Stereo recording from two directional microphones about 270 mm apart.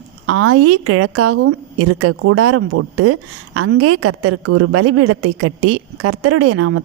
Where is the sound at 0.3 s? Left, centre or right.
Right.